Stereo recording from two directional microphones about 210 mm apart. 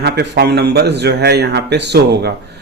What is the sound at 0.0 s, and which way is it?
A man's voice, 50° right (ahead or behind).